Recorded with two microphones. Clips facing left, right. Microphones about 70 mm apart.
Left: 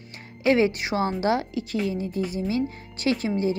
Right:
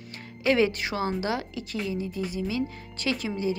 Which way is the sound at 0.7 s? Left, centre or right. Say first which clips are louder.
Left 2 dB; centre.